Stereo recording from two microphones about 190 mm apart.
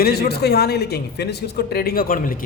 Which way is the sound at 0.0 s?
55° left (ahead or behind).